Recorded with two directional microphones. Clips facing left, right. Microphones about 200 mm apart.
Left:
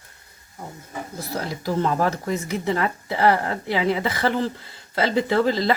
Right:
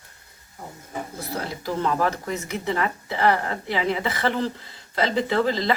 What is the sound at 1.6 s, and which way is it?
Speech, 35° left (ahead or behind).